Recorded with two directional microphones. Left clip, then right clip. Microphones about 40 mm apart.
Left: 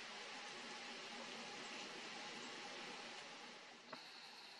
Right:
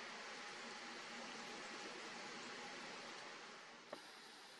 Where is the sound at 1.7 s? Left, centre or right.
Left.